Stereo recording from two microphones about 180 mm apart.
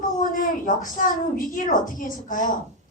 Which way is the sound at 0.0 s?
50° left (ahead or behind).